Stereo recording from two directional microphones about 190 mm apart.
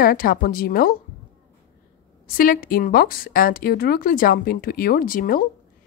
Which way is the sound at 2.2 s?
50° left (ahead or behind).